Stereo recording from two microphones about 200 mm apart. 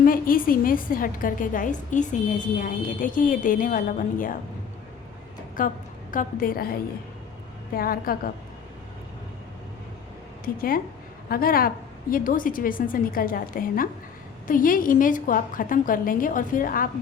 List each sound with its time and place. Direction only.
0.0 s a woman's voice: 45° left (ahead or behind)
5.5 s a woman's voice: 45° left (ahead or behind)
7.7 s a woman's voice: 45° left (ahead or behind)
10.4 s a woman's voice: 45° left (ahead or behind)